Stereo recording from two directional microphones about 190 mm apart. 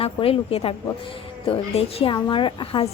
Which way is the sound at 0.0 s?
30° left (ahead or behind).